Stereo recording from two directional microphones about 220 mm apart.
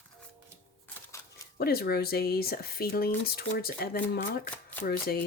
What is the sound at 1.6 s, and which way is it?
Speech, 45° left (ahead or behind).